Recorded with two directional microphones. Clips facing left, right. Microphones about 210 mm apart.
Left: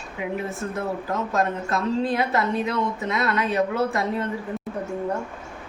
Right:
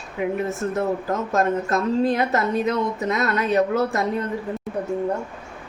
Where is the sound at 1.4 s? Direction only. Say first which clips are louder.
Right 4 dB; 45° right (ahead or behind).